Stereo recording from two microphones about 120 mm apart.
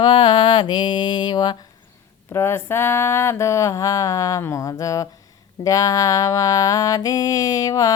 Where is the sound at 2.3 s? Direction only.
20° left (ahead or behind).